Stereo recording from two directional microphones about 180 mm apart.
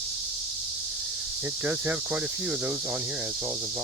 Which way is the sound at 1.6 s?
10° right (ahead or behind).